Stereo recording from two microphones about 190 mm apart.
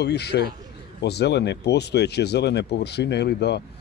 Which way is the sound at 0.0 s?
60° left (ahead or behind).